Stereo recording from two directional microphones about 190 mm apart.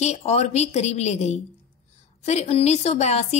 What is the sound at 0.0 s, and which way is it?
A woman's voice, 35° left (ahead or behind).